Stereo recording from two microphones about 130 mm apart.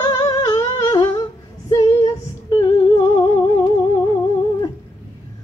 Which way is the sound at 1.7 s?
40° left (ahead or behind).